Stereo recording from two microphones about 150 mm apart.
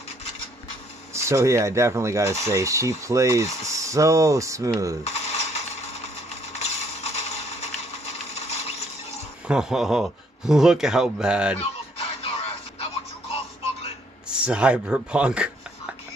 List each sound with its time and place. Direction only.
1.1 s speech: 20° right (ahead or behind)
5.0 s coin: 45° left (ahead or behind)
9.5 s speech: 5° right (ahead or behind)
12.2 s a sound: 40° left (ahead or behind)
14.4 s speech: 5° right (ahead or behind)